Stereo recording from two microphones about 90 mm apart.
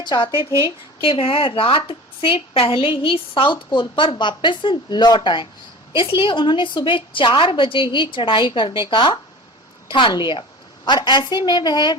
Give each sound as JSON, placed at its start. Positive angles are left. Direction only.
{"t": 0.0, "sound": "a woman's voice", "side_deg": 65}
{"t": 1.0, "sound": "a woman's voice", "side_deg": 85}
{"t": 5.9, "sound": "a woman's voice", "side_deg": 70}